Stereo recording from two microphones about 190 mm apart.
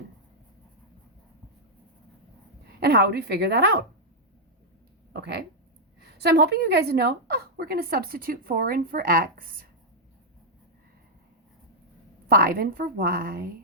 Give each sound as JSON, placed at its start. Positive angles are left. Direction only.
{"t": 2.8, "sound": "speech", "side_deg": -55}
{"t": 5.1, "sound": "speech", "side_deg": -60}
{"t": 12.3, "sound": "speech", "side_deg": -50}